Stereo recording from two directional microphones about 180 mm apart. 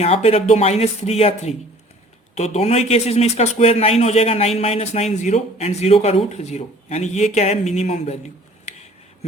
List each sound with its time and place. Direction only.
0.0 s speech: 35° left (ahead or behind)